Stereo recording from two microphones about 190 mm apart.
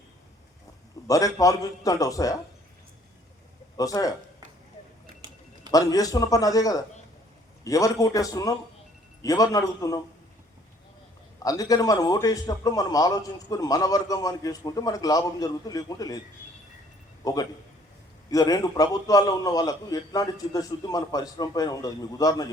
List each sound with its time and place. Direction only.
1.0 s a man's voice: 15° left (ahead or behind)
3.8 s a man's voice: 20° left (ahead or behind)
5.7 s a man's voice: 20° left (ahead or behind)
11.4 s a man's voice: 20° left (ahead or behind)
17.2 s a man's voice: 20° left (ahead or behind)